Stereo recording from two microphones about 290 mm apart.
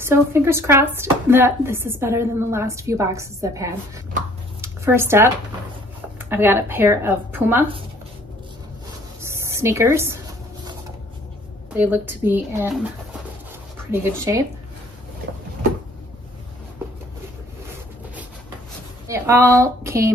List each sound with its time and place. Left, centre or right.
0.0 s speech: centre
4.6 s a sound: centre
6.1 s speech: centre
9.3 s a woman's voice: centre
11.7 s speech: centre
14.0 s speech: centre
19.0 s speech: centre